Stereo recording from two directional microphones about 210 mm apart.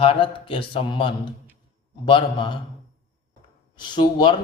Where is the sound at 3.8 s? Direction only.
20° left (ahead or behind).